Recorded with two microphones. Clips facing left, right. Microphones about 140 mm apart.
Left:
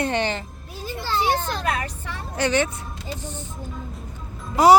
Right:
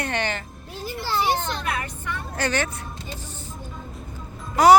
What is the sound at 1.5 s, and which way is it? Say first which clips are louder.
Speech: left 2 dB; 35° left (ahead or behind).